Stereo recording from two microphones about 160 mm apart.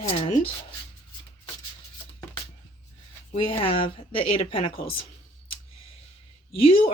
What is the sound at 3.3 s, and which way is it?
Speech, 40° left (ahead or behind).